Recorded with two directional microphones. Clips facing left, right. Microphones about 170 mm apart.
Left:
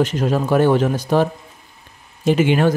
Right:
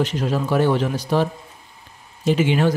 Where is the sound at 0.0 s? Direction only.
50° left (ahead or behind).